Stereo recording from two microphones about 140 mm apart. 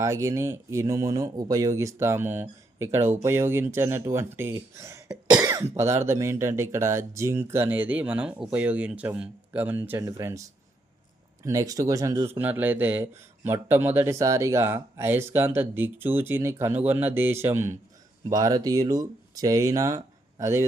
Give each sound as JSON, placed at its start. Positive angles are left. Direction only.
{"t": 0.0, "sound": "speech", "side_deg": -20}
{"t": 11.4, "sound": "speech", "side_deg": -25}